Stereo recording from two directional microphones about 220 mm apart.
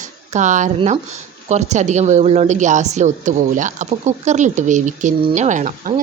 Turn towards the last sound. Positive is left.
turn(degrees=-35)  # may be behind; listen again after turning